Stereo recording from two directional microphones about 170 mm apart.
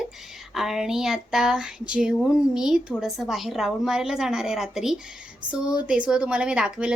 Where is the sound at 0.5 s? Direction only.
Centre (ahead or behind).